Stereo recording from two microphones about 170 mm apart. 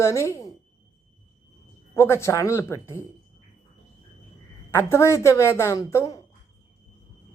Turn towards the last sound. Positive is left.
turn(degrees=20)  # may be behind; listen again after turning